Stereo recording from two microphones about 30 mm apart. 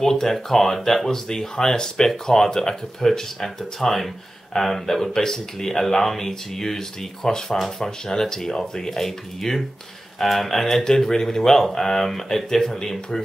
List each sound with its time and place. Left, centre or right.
0.0 s speech: centre